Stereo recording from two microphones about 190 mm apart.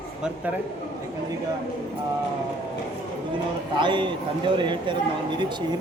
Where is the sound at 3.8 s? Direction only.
25° right (ahead or behind).